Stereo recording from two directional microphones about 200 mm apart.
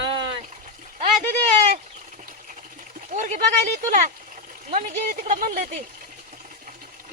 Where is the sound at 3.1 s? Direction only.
35° right (ahead or behind).